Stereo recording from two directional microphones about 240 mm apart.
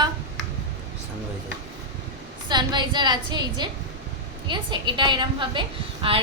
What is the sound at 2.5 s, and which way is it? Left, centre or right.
A woman's voice, centre.